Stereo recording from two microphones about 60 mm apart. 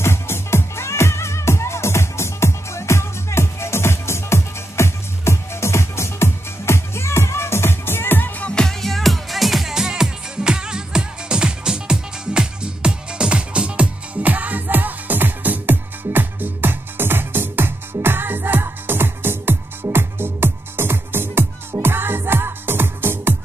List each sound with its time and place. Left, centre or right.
0.0 s music: left
8.5 s music: centre
8.8 s music: centre; by 23.3 s right